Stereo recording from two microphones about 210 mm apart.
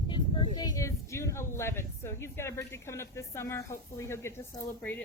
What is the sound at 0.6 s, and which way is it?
Speech, 15° left (ahead or behind).